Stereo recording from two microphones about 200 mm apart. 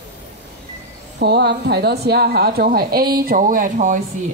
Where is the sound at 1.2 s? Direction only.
55° right (ahead or behind).